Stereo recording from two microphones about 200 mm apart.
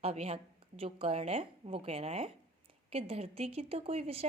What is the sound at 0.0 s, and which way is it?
A woman's voice, 30° right (ahead or behind).